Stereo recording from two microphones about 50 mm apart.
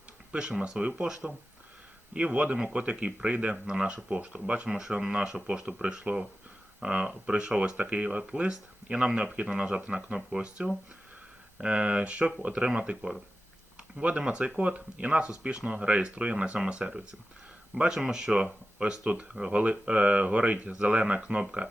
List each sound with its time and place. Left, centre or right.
0.3 s speech: centre